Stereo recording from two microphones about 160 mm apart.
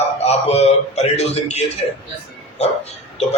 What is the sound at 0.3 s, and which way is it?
A man's voice, 40° left (ahead or behind).